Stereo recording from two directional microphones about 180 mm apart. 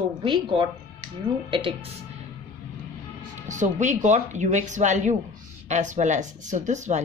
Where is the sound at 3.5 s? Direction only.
45° right (ahead or behind).